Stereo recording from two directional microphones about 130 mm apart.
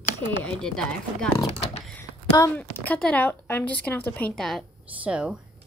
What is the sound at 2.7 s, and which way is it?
Speech, 10° left (ahead or behind).